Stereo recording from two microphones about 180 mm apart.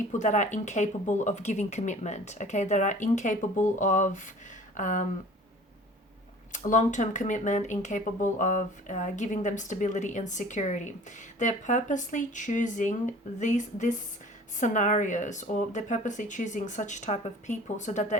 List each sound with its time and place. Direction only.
0.1 s speech: 45° left (ahead or behind)
6.5 s speech: 45° left (ahead or behind)